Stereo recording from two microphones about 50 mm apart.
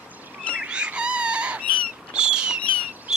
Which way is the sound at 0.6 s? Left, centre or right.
Right.